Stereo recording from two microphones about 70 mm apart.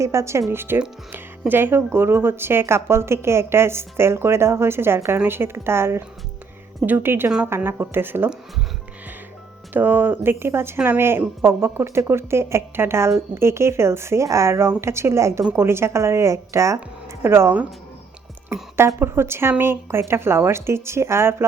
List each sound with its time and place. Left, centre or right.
0.0 s speech: right
9.7 s speech: right
18.9 s speech: right